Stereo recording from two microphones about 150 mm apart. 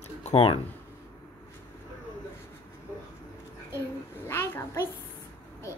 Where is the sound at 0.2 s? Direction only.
45° left (ahead or behind).